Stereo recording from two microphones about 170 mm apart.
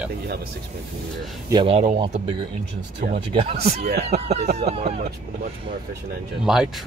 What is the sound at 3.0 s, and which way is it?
Speech, 55° right (ahead or behind).